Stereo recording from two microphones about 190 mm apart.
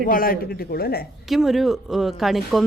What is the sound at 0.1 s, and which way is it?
Speech, 50° left (ahead or behind).